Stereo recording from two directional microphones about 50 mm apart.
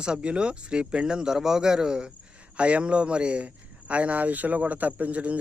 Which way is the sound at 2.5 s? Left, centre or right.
Right.